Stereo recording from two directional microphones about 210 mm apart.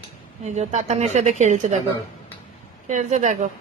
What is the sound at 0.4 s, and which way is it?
A woman's voice, 35° right (ahead or behind).